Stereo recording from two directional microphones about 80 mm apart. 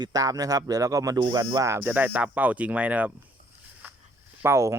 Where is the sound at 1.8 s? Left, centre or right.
Right.